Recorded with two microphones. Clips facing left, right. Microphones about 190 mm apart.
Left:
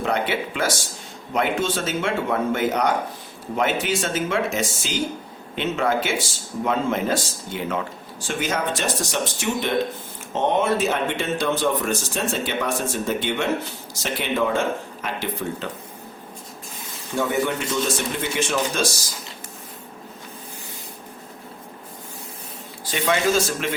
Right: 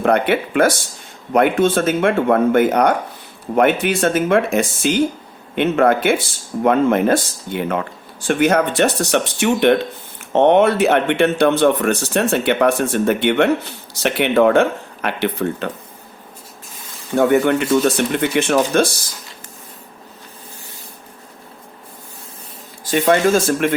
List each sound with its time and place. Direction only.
0.0 s speech: 60° right (ahead or behind)
17.2 s speech: 60° right (ahead or behind)
22.8 s speech: 45° right (ahead or behind)